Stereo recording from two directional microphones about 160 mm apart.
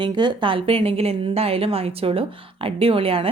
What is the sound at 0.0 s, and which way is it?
Speech, 30° right (ahead or behind).